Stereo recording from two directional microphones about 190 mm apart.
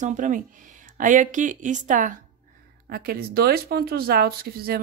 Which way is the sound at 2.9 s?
50° right (ahead or behind).